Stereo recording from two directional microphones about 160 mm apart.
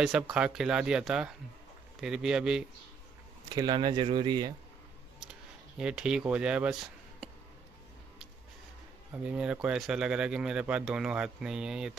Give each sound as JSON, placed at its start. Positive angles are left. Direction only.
{"t": 0.0, "sound": "speech", "side_deg": -5}
{"t": 3.4, "sound": "speech", "side_deg": -25}
{"t": 5.8, "sound": "speech", "side_deg": -5}
{"t": 9.2, "sound": "speech", "side_deg": -5}